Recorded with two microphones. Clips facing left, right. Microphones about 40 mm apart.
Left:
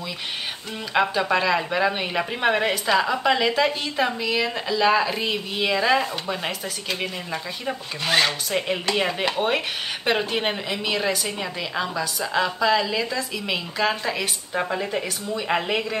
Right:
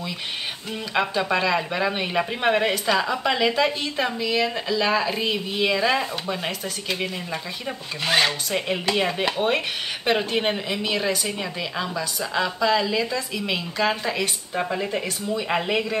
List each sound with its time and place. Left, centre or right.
0.9 s speech: centre